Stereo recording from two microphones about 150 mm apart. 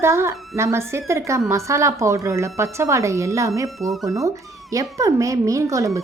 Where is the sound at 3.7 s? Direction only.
Centre (ahead or behind).